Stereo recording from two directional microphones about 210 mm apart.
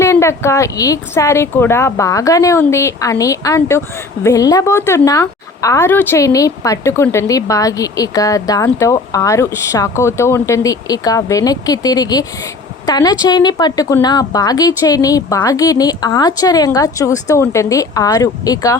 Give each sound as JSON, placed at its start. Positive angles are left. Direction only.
{"t": 0.0, "sound": "speech", "side_deg": 15}